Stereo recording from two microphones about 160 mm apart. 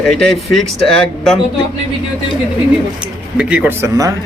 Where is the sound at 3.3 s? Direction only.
10° right (ahead or behind).